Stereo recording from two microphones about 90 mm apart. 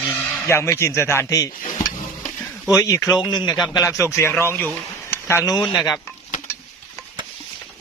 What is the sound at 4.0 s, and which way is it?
Speech, 35° left (ahead or behind).